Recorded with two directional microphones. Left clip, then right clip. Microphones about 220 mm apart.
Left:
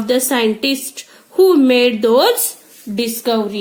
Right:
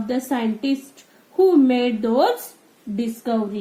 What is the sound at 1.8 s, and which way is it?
Speech, 20° left (ahead or behind).